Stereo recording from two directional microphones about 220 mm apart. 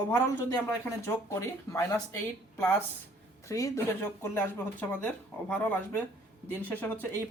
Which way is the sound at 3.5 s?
15° left (ahead or behind).